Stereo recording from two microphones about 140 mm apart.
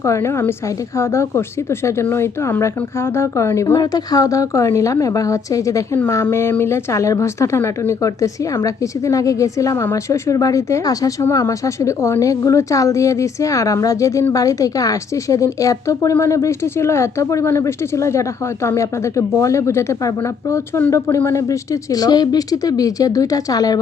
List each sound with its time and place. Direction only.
0.0 s speech: 20° left (ahead or behind)